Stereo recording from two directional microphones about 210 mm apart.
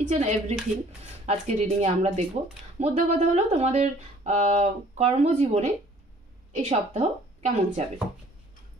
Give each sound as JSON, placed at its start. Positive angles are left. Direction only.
{"t": 0.1, "sound": "speech", "side_deg": -30}